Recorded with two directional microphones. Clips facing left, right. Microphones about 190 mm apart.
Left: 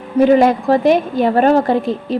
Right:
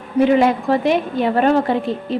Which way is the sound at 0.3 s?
40° left (ahead or behind).